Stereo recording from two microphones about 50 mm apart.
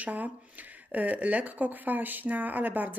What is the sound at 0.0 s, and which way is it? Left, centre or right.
A woman's voice, right.